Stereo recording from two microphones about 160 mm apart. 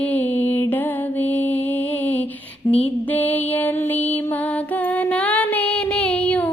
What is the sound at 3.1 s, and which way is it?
Music, 10° left (ahead or behind).